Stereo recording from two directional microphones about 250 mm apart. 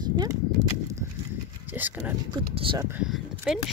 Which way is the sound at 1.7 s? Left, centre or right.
Centre.